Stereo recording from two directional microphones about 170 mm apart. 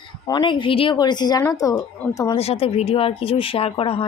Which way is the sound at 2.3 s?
35° left (ahead or behind).